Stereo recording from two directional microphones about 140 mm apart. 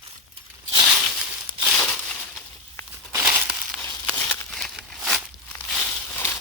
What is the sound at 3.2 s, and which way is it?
Crumpling, 10° right (ahead or behind).